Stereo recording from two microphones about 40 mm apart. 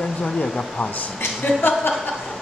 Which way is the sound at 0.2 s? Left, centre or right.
Left.